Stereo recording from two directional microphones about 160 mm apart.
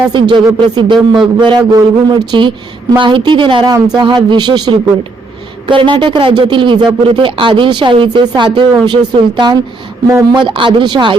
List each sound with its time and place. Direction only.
0.1 s speech: 30° right (ahead or behind)
0.9 s speech: centre (ahead or behind)
1.4 s speech: 25° right (ahead or behind)
5.6 s speech: 30° right (ahead or behind)